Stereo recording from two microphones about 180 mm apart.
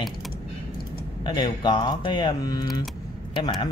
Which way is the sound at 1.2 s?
25° left (ahead or behind).